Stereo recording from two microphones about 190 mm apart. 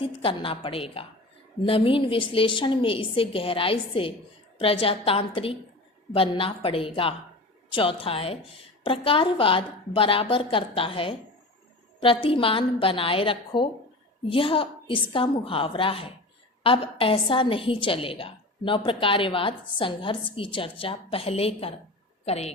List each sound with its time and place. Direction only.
0.0 s a woman's voice: 30° left (ahead or behind)